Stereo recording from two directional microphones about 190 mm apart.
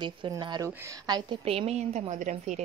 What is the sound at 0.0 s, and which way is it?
A woman's voice, 25° right (ahead or behind).